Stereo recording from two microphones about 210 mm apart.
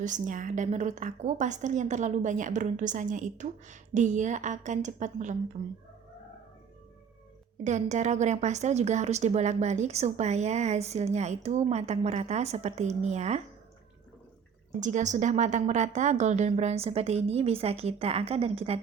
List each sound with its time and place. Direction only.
0.0 s a woman's voice: 35° right (ahead or behind)
7.6 s a woman's voice: 35° right (ahead or behind)
14.8 s a woman's voice: 35° right (ahead or behind)